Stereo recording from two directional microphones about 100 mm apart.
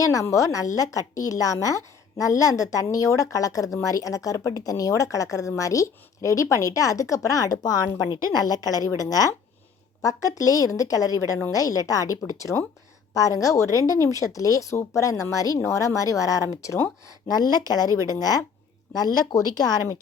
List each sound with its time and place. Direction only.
0.0 s speech: 35° left (ahead or behind)
17.2 s speech: 40° left (ahead or behind)